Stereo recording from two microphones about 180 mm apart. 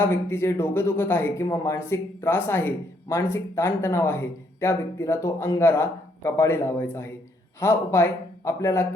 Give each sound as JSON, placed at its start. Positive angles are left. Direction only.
{"t": 0.0, "sound": "speech", "side_deg": 15}